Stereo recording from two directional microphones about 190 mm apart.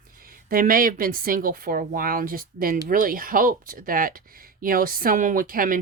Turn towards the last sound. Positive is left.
turn(degrees=-50)  # may be behind; listen again after turning